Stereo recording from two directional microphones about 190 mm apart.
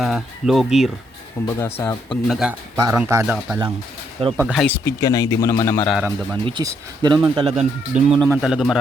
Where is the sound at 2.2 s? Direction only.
Centre (ahead or behind).